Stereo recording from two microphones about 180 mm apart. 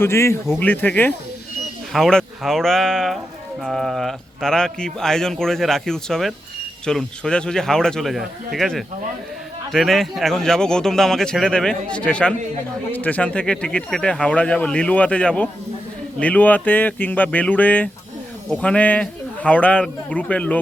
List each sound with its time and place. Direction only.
0.0 s a man's voice: 15° left (ahead or behind)